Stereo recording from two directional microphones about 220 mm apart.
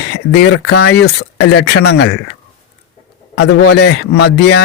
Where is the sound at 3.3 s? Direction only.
50° left (ahead or behind).